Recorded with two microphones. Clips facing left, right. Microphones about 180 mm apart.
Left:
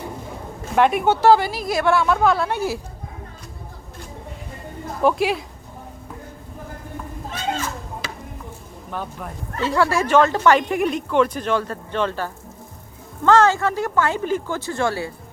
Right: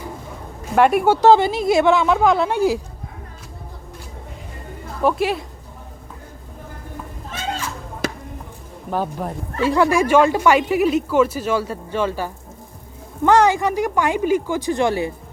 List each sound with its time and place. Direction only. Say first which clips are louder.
0.6 s speech: right 2 dB; 5° right (ahead or behind)
1.3 s a woman's voice: right 3 dB; 25° right (ahead or behind)
5.0 s a woman's voice: even; centre (ahead or behind)
8.9 s speech: right 7 dB; 35° right (ahead or behind)
9.6 s speech: right 3 dB; 15° right (ahead or behind)